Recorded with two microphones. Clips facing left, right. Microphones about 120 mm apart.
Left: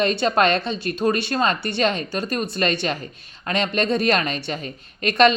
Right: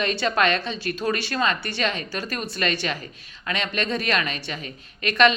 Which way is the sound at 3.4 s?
35° left (ahead or behind).